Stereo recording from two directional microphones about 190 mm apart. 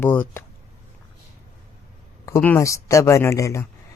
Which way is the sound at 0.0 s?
10° left (ahead or behind).